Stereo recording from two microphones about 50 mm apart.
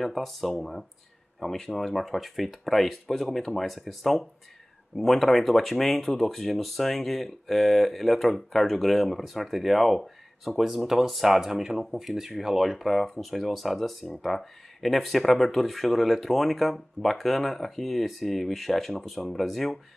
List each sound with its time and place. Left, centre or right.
0.0 s speech: centre